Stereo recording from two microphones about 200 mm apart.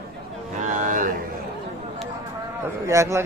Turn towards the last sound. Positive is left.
turn(degrees=-15)  # may be behind; listen again after turning